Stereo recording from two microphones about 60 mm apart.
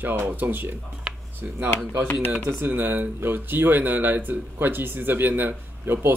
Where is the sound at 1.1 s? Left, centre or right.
Centre.